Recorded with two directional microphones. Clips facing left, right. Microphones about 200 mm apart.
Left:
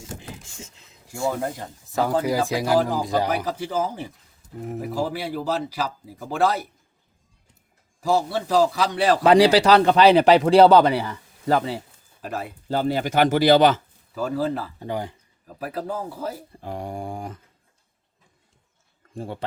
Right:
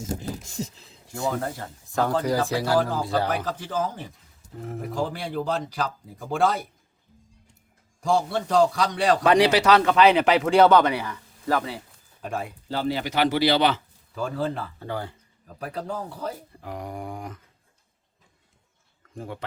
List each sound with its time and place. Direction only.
0.0 s a sound: 40° right (ahead or behind)
1.3 s speech: 10° left (ahead or behind)
8.0 s speech: 5° left (ahead or behind)
9.2 s speech: 30° left (ahead or behind)
12.2 s speech: 5° left (ahead or behind)
12.6 s speech: 45° left (ahead or behind)
14.2 s speech: 5° left (ahead or behind)
14.8 s speech: 15° left (ahead or behind)
15.5 s speech: 5° left (ahead or behind)
16.6 s speech: 30° left (ahead or behind)
19.1 s speech: 30° left (ahead or behind)